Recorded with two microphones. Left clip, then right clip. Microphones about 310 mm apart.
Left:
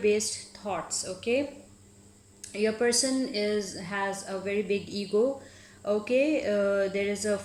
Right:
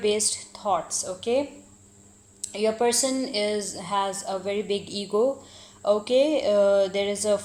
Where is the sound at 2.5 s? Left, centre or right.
Right.